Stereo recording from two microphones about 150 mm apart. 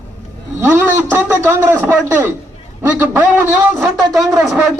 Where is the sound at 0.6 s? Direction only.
15° right (ahead or behind).